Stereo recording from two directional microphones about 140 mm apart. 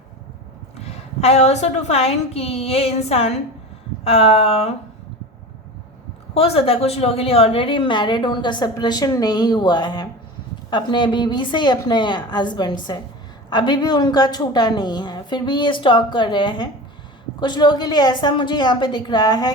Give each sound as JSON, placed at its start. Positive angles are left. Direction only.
{"t": 0.9, "sound": "a woman's voice", "side_deg": 50}
{"t": 6.3, "sound": "a woman's voice", "side_deg": 45}